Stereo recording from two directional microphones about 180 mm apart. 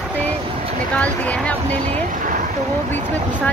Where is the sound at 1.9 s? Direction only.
40° right (ahead or behind).